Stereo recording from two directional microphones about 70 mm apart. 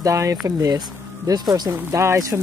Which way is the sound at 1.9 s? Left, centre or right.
Right.